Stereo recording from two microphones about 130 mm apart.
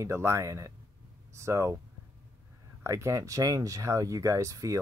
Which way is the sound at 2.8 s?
20° right (ahead or behind).